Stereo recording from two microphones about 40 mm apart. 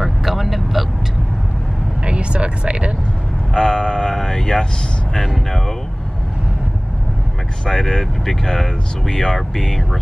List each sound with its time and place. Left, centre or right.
0.0 s vehicle: centre
2.0 s vehicle: right
3.5 s vehicle: centre
5.1 s speech: centre
7.6 s speech: centre